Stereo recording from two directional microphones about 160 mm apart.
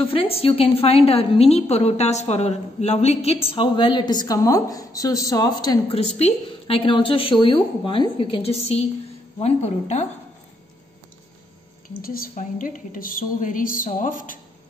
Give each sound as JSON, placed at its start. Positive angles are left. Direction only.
{"t": 0.0, "sound": "a woman's voice", "side_deg": 35}
{"t": 6.1, "sound": "a woman's voice", "side_deg": 40}
{"t": 12.0, "sound": "a woman's voice", "side_deg": 65}